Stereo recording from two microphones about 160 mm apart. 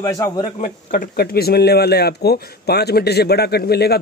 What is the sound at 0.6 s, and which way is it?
Speech, 55° left (ahead or behind).